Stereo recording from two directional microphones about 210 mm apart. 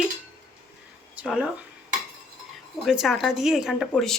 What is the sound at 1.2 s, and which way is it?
Speech, 5° right (ahead or behind).